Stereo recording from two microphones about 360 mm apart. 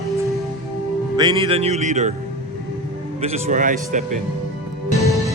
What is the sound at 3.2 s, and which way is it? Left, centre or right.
Speech, centre.